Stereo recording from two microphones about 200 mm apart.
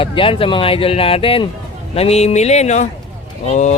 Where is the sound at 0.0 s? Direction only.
25° left (ahead or behind).